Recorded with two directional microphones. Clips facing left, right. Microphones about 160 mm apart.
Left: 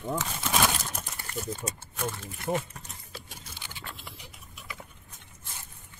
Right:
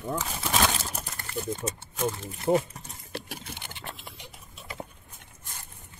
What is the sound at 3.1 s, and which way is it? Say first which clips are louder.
Vehicle: right 9 dB; 70° right (ahead or behind).